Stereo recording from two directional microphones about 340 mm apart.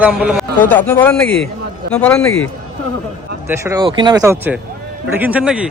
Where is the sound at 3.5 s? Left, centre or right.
Centre.